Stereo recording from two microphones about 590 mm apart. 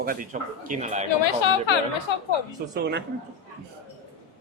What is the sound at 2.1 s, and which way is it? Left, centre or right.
Speech, left.